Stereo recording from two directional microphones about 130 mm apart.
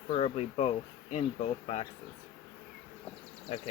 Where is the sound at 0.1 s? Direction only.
50° left (ahead or behind).